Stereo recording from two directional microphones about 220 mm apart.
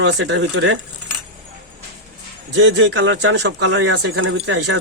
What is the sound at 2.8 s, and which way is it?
Speech, 55° right (ahead or behind).